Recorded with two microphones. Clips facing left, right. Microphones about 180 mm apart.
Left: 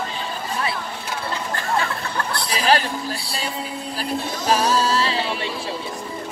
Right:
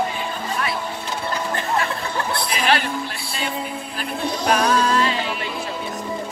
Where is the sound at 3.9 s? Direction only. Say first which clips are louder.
Right 1 dB; 30° left (ahead or behind).